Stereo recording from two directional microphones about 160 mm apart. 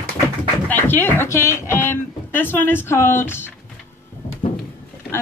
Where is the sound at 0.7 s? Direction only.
10° left (ahead or behind).